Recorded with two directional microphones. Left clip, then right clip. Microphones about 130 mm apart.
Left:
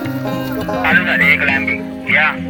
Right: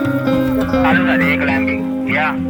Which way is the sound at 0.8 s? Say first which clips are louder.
Left 3 dB; 15° right (ahead or behind).